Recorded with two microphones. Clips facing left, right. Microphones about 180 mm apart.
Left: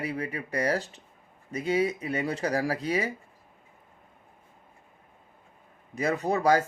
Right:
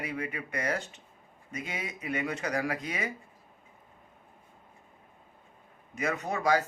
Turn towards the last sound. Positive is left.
turn(degrees=40)  # may be behind; listen again after turning